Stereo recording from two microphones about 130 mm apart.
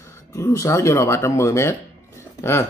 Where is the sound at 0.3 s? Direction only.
25° left (ahead or behind).